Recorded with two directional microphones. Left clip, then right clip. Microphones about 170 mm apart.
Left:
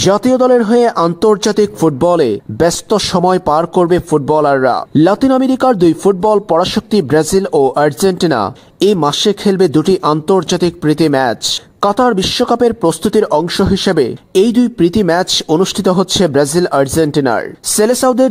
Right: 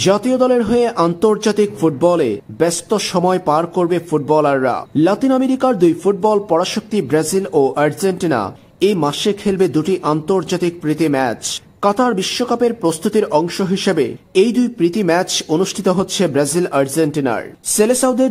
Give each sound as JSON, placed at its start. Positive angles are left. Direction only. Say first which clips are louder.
{"t": 0.0, "sound": "speech", "louder": "left 4 dB", "side_deg": 30}